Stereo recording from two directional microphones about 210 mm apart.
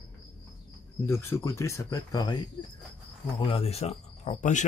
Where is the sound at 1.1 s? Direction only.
15° left (ahead or behind).